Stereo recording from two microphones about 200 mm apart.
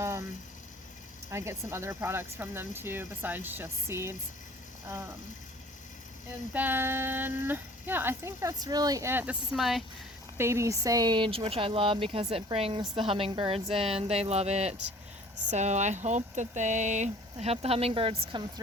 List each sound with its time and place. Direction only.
1.3 s speech: 15° right (ahead or behind)
6.5 s speech: 10° right (ahead or behind)
10.3 s speech: 15° right (ahead or behind)